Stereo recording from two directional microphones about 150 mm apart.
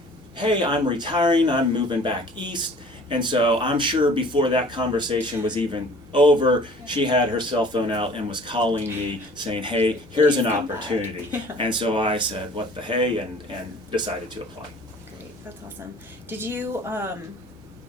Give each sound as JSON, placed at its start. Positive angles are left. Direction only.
{"t": 0.3, "sound": "speech", "side_deg": -30}
{"t": 16.3, "sound": "a woman's voice", "side_deg": -15}